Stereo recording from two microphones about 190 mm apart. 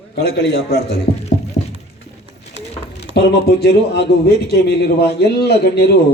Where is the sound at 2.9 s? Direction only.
60° left (ahead or behind).